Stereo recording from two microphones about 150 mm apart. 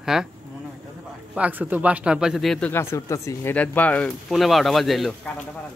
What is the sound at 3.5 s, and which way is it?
Speech, 10° left (ahead or behind).